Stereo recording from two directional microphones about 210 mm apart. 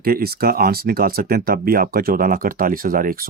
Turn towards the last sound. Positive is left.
turn(degrees=-45)  # may be behind; listen again after turning